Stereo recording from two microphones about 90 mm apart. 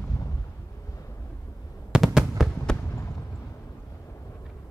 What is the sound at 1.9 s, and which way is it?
Fireworks, 10° right (ahead or behind).